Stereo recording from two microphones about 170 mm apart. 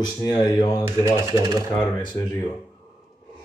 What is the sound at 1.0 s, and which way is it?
Speech, 20° right (ahead or behind).